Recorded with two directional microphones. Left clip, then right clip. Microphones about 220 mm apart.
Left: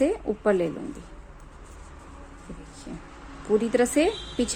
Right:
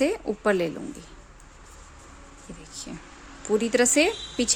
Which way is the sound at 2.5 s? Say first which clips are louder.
Even; 25° right (ahead or behind).